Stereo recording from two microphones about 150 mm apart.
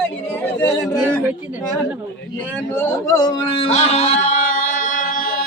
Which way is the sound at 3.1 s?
30° left (ahead or behind).